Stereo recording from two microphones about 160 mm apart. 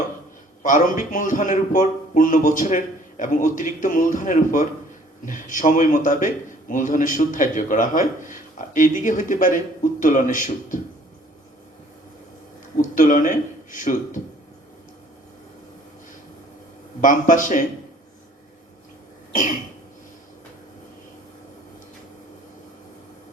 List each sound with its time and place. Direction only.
0.6 s a man's voice: 55° left (ahead or behind)
12.7 s speech: 55° left (ahead or behind)
17.0 s a man's voice: 55° left (ahead or behind)
19.3 s cough: 50° left (ahead or behind)